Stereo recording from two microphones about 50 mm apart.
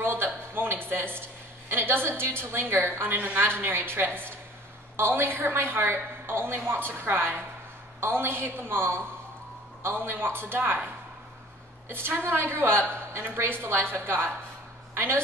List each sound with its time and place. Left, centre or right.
0.0 s a sound: right
3.3 s a woman's voice: right
11.9 s a woman's voice: right